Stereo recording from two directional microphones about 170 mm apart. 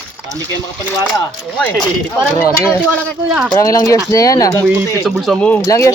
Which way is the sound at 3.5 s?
20° left (ahead or behind).